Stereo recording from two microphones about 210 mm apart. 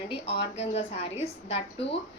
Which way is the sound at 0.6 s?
30° left (ahead or behind).